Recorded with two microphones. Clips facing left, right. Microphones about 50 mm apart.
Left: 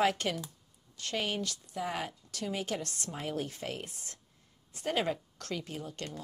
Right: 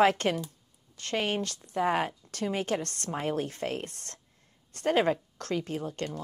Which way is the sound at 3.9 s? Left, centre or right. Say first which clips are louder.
Right 2 dB; right.